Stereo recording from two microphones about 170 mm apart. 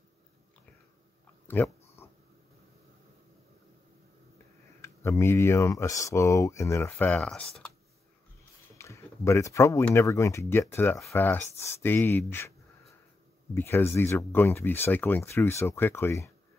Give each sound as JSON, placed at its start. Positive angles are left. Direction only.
{"t": 1.5, "sound": "speech", "side_deg": 10}
{"t": 2.0, "sound": "cat", "side_deg": 15}
{"t": 4.8, "sound": "speech", "side_deg": 15}
{"t": 8.7, "sound": "a sound", "side_deg": 15}
{"t": 9.8, "sound": "speech", "side_deg": 15}
{"t": 13.6, "sound": "speech", "side_deg": 15}